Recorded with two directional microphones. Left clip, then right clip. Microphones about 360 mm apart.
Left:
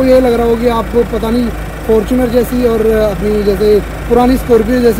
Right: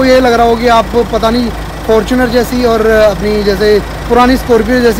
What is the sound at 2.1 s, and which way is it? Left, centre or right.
Speech, centre.